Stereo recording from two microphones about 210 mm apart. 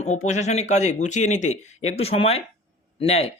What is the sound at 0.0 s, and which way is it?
A man's voice, 35° left (ahead or behind).